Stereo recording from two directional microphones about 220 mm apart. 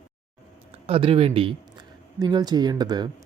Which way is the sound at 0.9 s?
25° right (ahead or behind).